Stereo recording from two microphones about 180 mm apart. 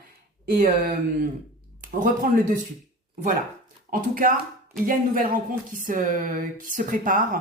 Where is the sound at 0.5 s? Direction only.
45° right (ahead or behind).